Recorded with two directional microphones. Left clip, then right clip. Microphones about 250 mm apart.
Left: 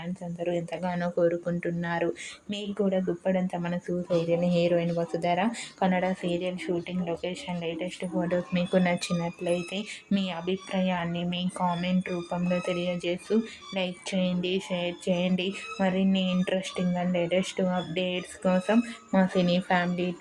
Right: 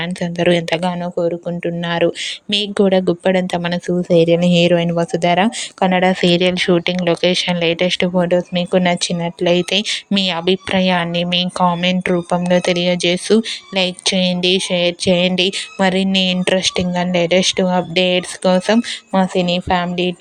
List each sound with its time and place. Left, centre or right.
0.0 s speech: right